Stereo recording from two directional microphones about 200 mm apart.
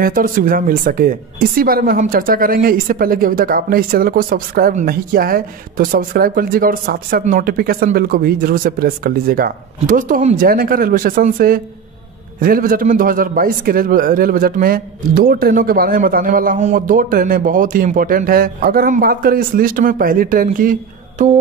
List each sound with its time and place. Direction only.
0.0 s speech: 45° right (ahead or behind)